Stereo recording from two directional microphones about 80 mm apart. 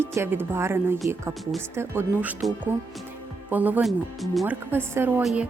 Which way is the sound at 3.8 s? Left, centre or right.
Centre.